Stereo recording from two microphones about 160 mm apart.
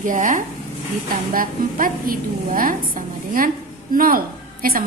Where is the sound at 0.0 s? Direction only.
55° right (ahead or behind).